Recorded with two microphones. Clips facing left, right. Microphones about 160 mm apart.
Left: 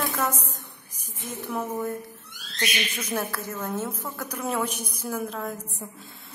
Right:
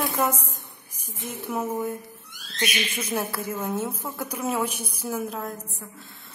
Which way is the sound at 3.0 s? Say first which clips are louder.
Right 2 dB; 10° right (ahead or behind).